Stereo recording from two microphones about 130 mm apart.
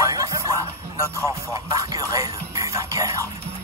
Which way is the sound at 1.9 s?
25° right (ahead or behind).